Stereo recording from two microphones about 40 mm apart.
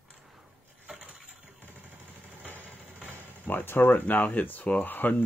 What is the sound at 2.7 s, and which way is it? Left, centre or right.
Vehicle, right.